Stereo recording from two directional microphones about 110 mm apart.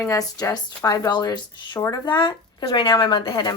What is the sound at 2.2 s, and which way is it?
Speech, 55° left (ahead or behind).